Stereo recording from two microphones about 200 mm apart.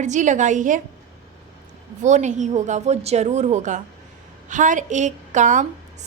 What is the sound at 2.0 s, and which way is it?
A woman's voice, 35° right (ahead or behind).